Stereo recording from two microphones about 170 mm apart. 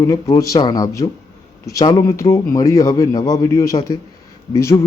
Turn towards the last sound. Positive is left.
turn(degrees=15)  # may be behind; listen again after turning